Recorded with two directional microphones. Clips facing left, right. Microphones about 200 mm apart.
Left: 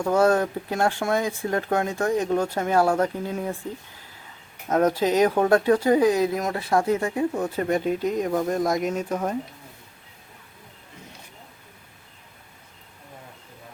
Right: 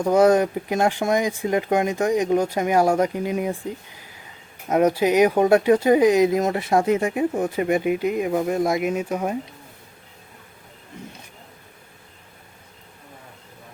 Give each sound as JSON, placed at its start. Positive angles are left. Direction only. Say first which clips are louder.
{"t": 0.0, "sound": "speech", "louder": "right 4 dB", "side_deg": -15}
{"t": 4.7, "sound": "speech", "louder": "right 3 dB", "side_deg": -10}